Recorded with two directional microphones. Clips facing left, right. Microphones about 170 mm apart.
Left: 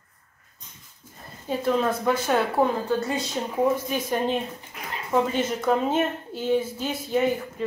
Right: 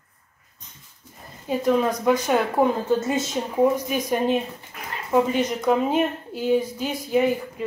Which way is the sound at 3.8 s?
10° right (ahead or behind).